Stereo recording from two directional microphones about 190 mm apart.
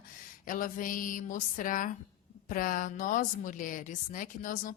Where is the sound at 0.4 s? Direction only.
45° left (ahead or behind).